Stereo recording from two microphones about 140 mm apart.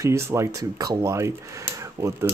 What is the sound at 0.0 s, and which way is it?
Speech, 20° right (ahead or behind).